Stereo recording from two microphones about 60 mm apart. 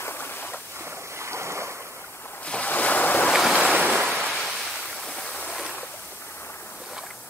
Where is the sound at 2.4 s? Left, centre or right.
Left.